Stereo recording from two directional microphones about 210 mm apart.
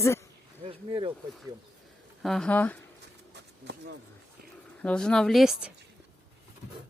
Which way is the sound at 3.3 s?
55° right (ahead or behind).